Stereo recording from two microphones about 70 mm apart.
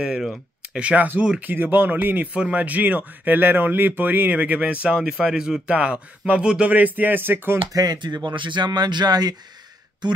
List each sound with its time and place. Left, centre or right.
0.0 s speech: centre
0.7 s speech: centre
7.7 s speech: right